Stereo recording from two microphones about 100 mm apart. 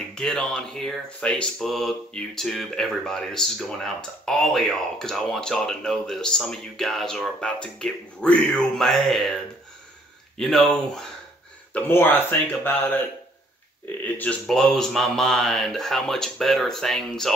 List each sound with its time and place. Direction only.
0.1 s speech: 5° left (ahead or behind)
10.3 s speech: 5° left (ahead or behind)
11.7 s speech: 20° left (ahead or behind)
14.0 s speech: 15° left (ahead or behind)
14.5 s speech: 5° left (ahead or behind)